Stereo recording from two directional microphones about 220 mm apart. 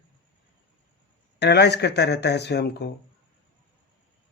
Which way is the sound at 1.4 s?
50° left (ahead or behind).